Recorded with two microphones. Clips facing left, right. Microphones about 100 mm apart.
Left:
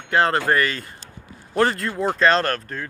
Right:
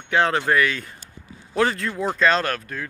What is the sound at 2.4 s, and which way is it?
Speech, 30° left (ahead or behind).